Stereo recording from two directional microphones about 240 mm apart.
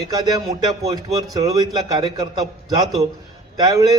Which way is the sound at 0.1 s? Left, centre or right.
Centre.